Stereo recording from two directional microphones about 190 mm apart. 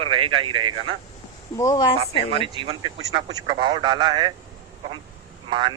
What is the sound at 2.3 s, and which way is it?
A man's voice, 30° right (ahead or behind).